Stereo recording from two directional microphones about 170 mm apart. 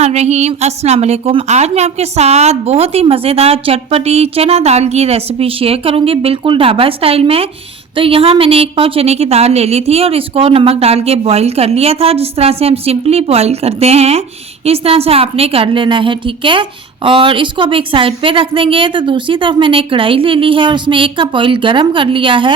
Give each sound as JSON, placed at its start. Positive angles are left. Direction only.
{"t": 0.0, "sound": "a woman's voice", "side_deg": -40}